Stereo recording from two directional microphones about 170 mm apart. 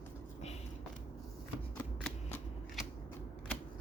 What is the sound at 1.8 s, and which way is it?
Shuffling cards, 10° left (ahead or behind).